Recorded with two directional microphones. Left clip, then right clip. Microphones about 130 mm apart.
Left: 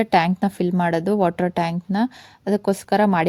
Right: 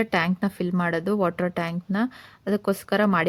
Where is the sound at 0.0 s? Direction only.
35° left (ahead or behind).